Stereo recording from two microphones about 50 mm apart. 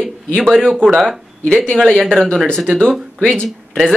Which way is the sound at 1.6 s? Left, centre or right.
Centre.